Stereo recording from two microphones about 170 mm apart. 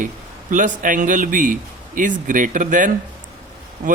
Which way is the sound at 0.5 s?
50° right (ahead or behind).